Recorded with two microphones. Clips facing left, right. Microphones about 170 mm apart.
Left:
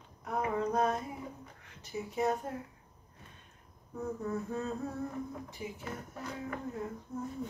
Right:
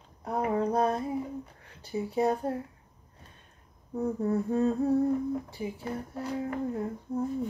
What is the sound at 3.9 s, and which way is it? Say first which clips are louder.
Speech: right 8 dB; 30° right (ahead or behind).